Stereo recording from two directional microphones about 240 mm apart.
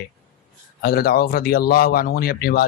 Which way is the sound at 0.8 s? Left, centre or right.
Left.